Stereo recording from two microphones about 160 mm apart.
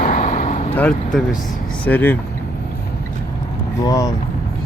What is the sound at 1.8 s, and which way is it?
Speech, 10° left (ahead or behind).